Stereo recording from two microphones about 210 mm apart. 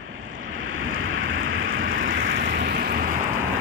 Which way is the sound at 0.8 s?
70° right (ahead or behind).